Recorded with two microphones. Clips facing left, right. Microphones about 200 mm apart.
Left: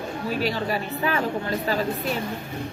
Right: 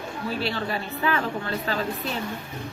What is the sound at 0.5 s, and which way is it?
Speech, 40° left (ahead or behind).